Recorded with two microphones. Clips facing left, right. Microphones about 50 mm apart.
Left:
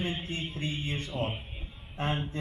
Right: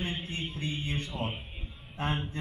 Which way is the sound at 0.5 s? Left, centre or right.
Left.